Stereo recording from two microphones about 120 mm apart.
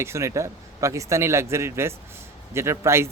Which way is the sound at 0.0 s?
25° right (ahead or behind).